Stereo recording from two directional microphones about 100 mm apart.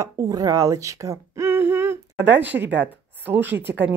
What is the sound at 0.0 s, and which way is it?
Speech, 35° right (ahead or behind).